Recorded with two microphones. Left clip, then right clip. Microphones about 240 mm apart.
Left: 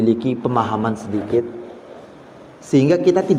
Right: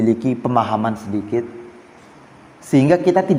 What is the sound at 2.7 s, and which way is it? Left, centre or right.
Speech, right.